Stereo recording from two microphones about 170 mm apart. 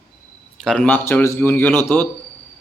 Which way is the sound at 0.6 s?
5° left (ahead or behind).